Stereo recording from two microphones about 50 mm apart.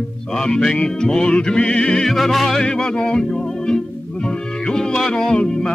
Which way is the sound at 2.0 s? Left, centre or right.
Centre.